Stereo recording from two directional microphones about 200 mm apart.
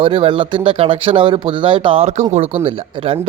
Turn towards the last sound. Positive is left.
turn(degrees=-25)  # may be behind; listen again after turning